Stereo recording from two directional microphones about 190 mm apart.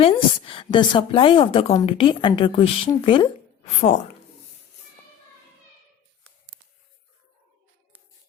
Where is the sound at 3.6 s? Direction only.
40° left (ahead or behind).